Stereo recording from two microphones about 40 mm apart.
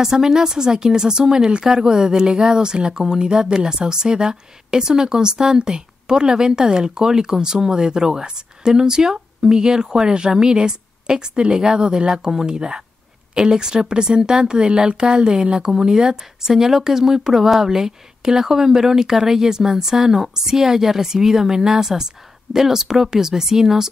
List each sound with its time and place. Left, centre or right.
0.0 s speech: centre